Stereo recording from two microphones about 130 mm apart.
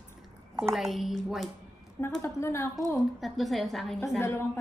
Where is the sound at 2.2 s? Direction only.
20° left (ahead or behind).